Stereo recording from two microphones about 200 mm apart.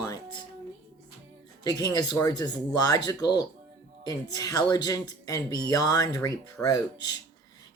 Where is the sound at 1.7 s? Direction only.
20° left (ahead or behind).